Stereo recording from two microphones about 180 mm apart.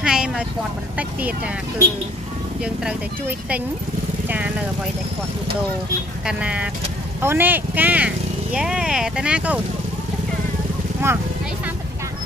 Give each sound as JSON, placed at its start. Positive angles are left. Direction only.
{"t": 0.0, "sound": "a sound", "side_deg": -5}
{"t": 0.9, "sound": "speech", "side_deg": -10}
{"t": 2.6, "sound": "speech", "side_deg": -5}
{"t": 6.2, "sound": "speech", "side_deg": -5}
{"t": 11.0, "sound": "speech", "side_deg": -15}